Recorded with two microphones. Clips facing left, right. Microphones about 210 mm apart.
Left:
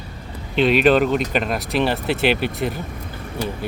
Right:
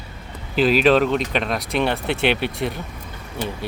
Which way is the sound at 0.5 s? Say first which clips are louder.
Left 1 dB; centre (ahead or behind).